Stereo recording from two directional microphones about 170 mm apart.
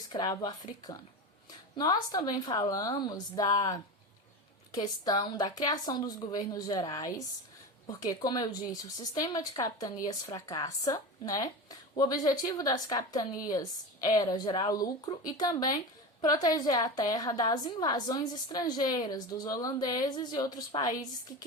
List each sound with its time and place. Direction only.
0.1 s a woman's voice: 25° left (ahead or behind)